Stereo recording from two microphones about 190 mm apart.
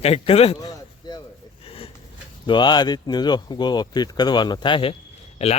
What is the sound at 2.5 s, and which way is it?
Speech, 25° left (ahead or behind).